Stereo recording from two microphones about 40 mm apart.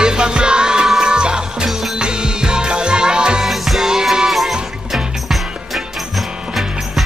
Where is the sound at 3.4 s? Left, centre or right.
Centre.